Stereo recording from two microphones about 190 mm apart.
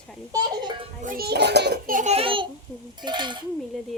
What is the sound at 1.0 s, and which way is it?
A child's voice, 50° right (ahead or behind).